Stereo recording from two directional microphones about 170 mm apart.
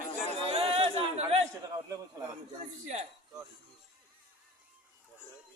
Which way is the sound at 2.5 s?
40° right (ahead or behind).